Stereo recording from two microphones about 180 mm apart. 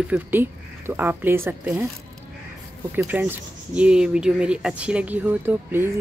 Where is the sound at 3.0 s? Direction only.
10° right (ahead or behind).